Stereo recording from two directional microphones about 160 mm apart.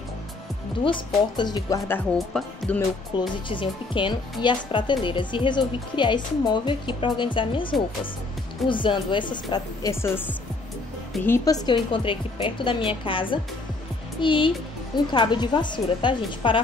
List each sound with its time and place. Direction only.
0.8 s speech: 30° left (ahead or behind)
2.1 s speech: centre (ahead or behind)
3.2 s a woman's voice: 30° left (ahead or behind)
10.0 s a woman's voice: 15° left (ahead or behind); by 16.5 s 30° left (ahead or behind)